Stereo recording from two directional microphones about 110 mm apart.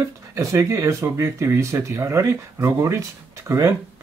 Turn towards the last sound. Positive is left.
turn(degrees=-25)  # may be behind; listen again after turning